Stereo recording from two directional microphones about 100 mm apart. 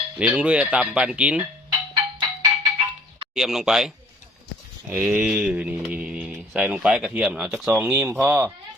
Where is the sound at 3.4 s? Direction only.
5° right (ahead or behind).